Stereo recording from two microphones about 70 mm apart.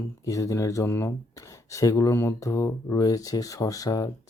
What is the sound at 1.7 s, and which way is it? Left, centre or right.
Speech, left.